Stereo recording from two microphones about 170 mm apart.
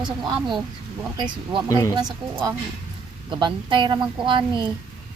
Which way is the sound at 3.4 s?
30° right (ahead or behind).